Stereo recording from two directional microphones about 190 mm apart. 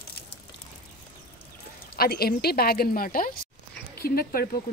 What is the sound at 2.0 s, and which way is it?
Speech, 55° left (ahead or behind).